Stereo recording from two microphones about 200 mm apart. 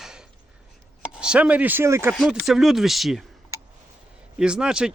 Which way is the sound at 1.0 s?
5° right (ahead or behind).